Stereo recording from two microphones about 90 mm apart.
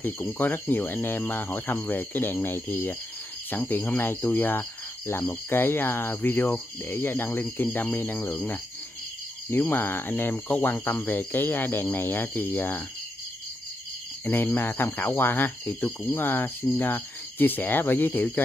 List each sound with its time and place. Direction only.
0.0 s speech: 20° left (ahead or behind)
14.2 s speech: 25° left (ahead or behind)